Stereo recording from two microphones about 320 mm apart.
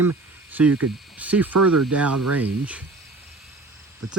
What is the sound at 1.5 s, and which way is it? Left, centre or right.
Speech, right.